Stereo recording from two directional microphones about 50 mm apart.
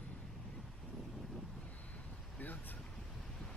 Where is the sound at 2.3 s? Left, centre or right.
Left.